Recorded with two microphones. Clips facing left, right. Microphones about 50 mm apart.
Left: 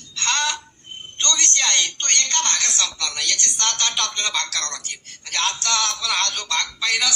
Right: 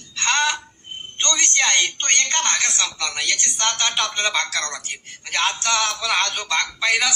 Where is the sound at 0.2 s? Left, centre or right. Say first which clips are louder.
Right 3 dB; right.